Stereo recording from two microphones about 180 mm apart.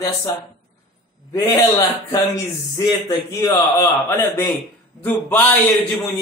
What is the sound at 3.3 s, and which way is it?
A man's voice, 15° left (ahead or behind).